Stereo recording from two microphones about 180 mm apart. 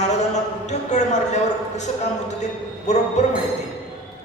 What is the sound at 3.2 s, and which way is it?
Speech, 40° left (ahead or behind).